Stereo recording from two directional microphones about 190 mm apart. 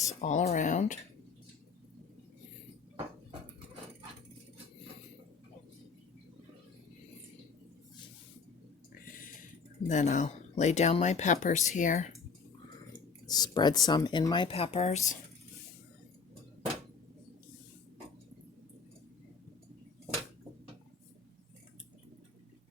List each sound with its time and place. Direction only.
0.0 s speech: 35° left (ahead or behind)
9.8 s speech: 40° left (ahead or behind)
13.2 s speech: 20° left (ahead or behind); by 15.2 s 40° left (ahead or behind)